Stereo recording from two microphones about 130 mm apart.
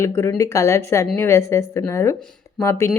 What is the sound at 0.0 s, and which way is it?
Speech, 20° left (ahead or behind).